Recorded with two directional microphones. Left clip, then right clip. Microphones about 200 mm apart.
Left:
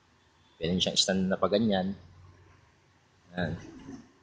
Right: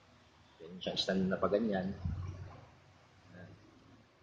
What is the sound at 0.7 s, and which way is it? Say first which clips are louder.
Speech: left 8 dB; 55° left (ahead or behind).